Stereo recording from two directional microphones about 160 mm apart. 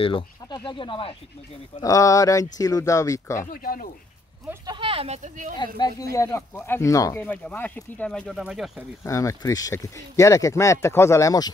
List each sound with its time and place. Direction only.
0.0 s speech: 30° left (ahead or behind)
1.8 s speech: 20° left (ahead or behind)
3.4 s speech: 65° left (ahead or behind)
4.6 s speech: 35° right (ahead or behind)
6.1 s speech: 15° left (ahead or behind)
7.2 s speech: 10° left (ahead or behind)
9.0 s speech: 20° left (ahead or behind)